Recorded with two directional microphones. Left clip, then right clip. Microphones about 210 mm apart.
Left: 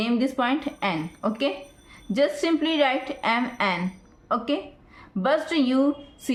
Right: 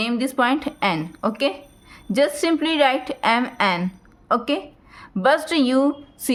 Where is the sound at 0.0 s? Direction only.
40° right (ahead or behind).